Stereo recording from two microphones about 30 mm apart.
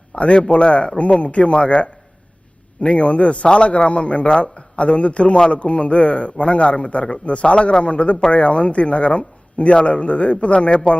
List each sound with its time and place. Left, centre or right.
0.2 s a man's voice: left